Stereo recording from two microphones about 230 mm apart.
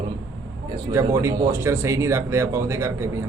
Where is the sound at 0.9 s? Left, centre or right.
Centre.